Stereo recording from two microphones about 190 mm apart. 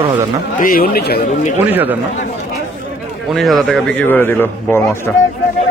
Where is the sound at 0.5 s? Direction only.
45° left (ahead or behind).